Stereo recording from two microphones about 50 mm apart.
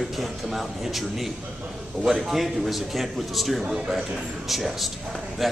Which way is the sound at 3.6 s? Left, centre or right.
Centre.